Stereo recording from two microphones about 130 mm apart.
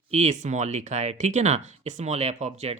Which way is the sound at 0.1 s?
60° right (ahead or behind).